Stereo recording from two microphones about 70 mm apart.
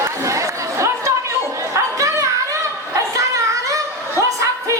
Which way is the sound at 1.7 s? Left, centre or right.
Right.